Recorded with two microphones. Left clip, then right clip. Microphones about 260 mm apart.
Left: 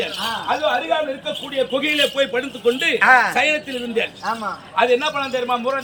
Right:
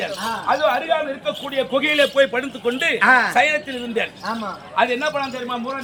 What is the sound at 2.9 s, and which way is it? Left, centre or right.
Speech, centre.